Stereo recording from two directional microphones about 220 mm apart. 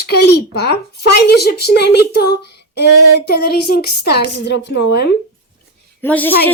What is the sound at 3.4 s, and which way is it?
Speech, 90° left.